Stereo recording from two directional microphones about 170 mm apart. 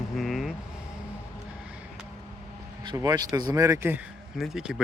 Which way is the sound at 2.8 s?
20° right (ahead or behind).